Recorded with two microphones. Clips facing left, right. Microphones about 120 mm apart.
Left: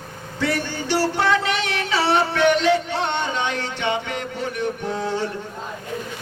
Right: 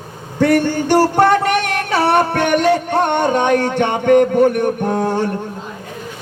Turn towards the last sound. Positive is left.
turn(degrees=-50)  # may be behind; listen again after turning